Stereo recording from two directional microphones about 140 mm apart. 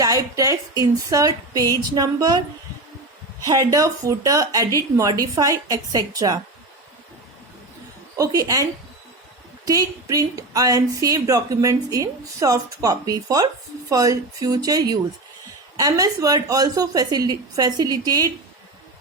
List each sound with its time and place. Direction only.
0.0 s a woman's voice: 25° right (ahead or behind)
3.4 s a woman's voice: 25° right (ahead or behind)
8.2 s a woman's voice: 25° right (ahead or behind)
9.6 s a woman's voice: 25° right (ahead or behind)